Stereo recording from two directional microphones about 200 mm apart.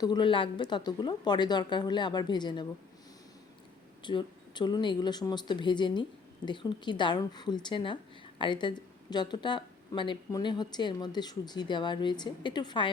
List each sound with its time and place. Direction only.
0.0 s speech: 20° left (ahead or behind)
4.0 s speech: 20° left (ahead or behind)